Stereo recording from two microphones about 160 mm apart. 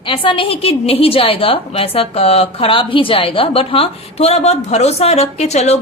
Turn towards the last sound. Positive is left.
turn(degrees=45)  # may be behind; listen again after turning